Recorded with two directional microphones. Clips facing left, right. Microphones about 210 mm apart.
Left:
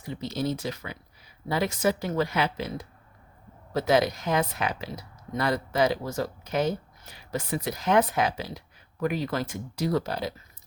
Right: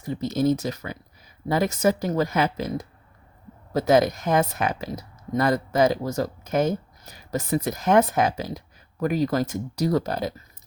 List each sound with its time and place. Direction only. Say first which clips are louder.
0.0 s speech: right 7 dB; 45° right (ahead or behind)